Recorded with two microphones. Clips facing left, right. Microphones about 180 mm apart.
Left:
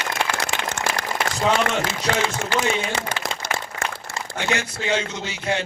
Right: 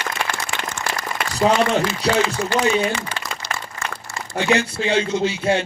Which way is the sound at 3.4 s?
50° left (ahead or behind).